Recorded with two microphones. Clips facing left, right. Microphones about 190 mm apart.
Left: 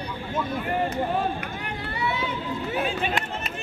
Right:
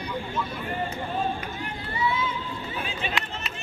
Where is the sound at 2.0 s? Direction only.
70° left (ahead or behind); by 3.2 s 50° left (ahead or behind).